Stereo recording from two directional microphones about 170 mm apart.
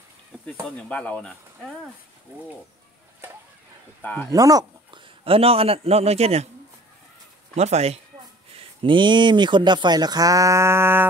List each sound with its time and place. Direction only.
0.7 s speech: 10° left (ahead or behind)
4.0 s speech: 10° left (ahead or behind)
4.3 s speech: 20° right (ahead or behind)
5.2 s a man's voice: 35° right (ahead or behind)
7.5 s a man's voice: 40° right (ahead or behind); by 11.1 s 15° right (ahead or behind)